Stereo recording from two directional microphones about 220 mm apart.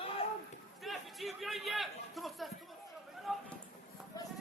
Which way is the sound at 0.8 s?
Centre (ahead or behind).